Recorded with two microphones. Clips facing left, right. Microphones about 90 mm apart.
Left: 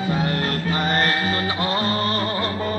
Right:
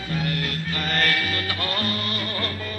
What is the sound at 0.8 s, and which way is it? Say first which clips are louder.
Music: left 2 dB; 35° left (ahead or behind).